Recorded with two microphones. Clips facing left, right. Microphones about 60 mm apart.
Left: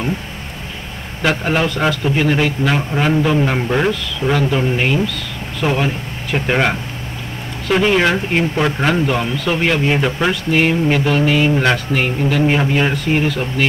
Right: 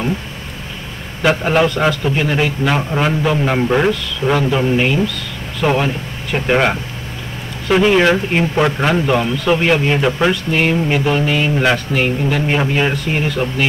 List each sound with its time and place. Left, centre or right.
1.2 s speech: centre
5.6 s speech: right
6.3 s speech: centre